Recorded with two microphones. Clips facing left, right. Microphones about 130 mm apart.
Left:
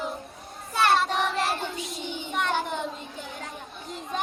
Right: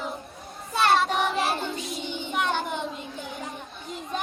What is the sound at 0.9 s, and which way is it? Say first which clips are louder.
Child singing: right 1 dB; centre (ahead or behind).